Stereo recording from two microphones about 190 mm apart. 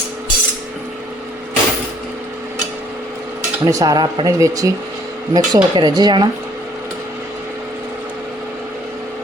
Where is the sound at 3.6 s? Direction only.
20° right (ahead or behind).